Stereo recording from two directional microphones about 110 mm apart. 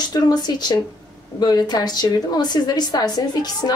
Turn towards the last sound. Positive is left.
turn(degrees=40)  # may be behind; listen again after turning